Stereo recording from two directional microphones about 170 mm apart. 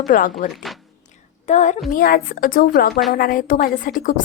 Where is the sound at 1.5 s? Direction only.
45° left (ahead or behind).